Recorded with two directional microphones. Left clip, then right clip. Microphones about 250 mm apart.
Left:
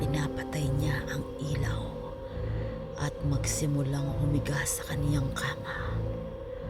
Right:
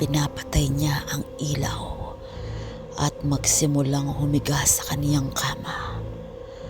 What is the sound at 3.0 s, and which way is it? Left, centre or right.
Speech, right.